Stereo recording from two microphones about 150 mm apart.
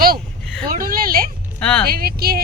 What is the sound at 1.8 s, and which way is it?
Speech, 90° right.